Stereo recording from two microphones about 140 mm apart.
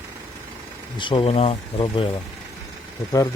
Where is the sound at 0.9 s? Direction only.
35° left (ahead or behind).